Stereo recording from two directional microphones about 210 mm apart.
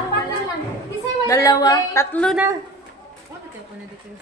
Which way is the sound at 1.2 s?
15° left (ahead or behind).